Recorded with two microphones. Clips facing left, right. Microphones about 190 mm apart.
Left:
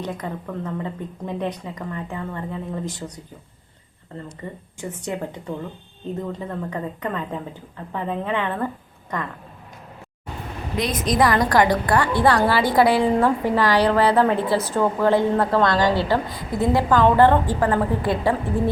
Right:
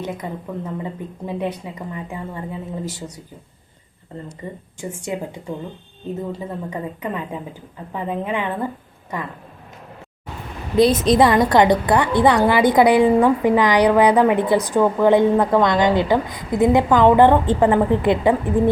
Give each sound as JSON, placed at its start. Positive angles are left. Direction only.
{"t": 0.0, "sound": "speech", "side_deg": -10}
{"t": 4.8, "sound": "a woman's voice", "side_deg": -10}
{"t": 10.8, "sound": "a woman's voice", "side_deg": -30}